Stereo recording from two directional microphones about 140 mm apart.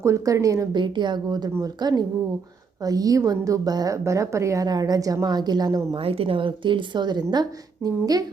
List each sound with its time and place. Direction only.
0.0 s a woman's voice: 20° right (ahead or behind)
6.0 s a woman's voice: 40° right (ahead or behind); by 8.2 s 25° right (ahead or behind)